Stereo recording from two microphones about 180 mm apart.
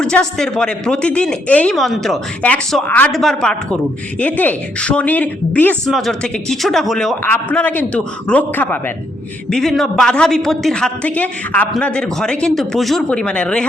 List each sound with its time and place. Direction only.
0.0 s a man's voice: 5° left (ahead or behind)